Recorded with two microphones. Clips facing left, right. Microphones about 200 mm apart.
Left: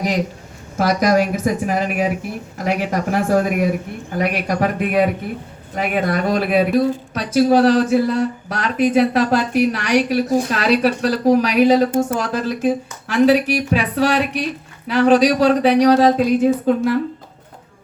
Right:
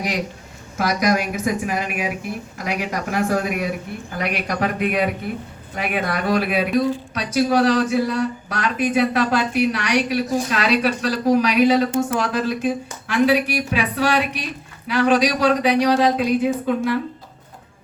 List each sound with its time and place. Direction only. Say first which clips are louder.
0.8 s speech: left 4 dB; 45° left (ahead or behind)